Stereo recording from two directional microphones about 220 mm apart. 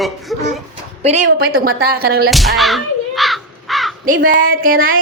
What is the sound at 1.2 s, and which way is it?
Speech, 45° right (ahead or behind).